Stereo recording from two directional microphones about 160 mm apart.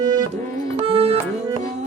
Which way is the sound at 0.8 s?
35° right (ahead or behind).